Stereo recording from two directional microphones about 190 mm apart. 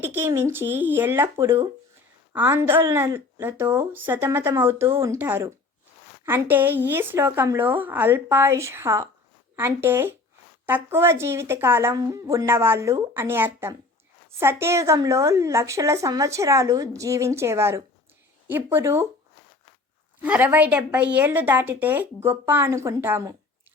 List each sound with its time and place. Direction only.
0.0 s a woman's voice: 10° right (ahead or behind)
20.2 s a woman's voice: 10° right (ahead or behind)